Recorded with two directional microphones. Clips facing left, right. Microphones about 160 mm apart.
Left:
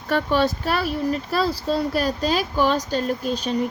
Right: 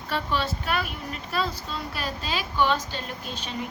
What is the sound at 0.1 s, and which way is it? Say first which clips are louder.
Speech: left 8 dB; 45° left (ahead or behind).